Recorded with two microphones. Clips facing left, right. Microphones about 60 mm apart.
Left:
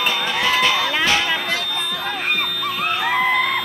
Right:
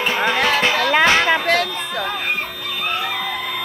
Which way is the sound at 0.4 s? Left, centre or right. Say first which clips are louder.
Left 2 dB; right.